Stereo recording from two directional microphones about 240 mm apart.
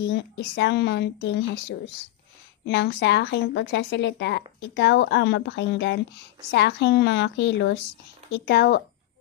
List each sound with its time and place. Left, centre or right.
0.0 s a woman's voice: left